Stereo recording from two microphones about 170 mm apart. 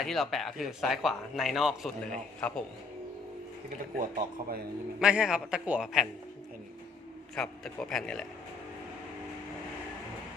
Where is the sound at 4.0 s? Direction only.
60° right (ahead or behind).